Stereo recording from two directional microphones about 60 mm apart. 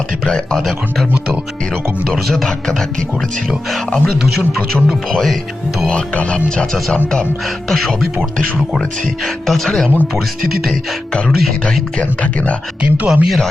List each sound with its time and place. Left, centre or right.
0.3 s speech: centre
2.0 s speech: centre
3.8 s speech: centre
4.2 s music: centre
5.9 s speech: centre
7.7 s speech: centre
10.7 s music: centre
11.6 s speech: centre
13.1 s music: centre